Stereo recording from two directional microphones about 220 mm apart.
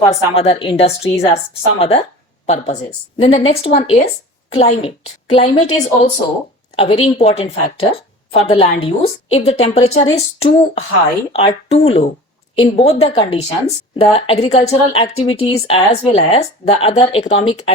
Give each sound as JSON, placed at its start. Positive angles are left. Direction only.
{"t": 0.1, "sound": "a woman's voice", "side_deg": 25}